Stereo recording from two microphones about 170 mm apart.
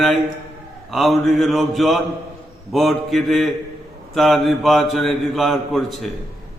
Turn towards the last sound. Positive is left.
turn(degrees=0)  # may be behind; listen again after turning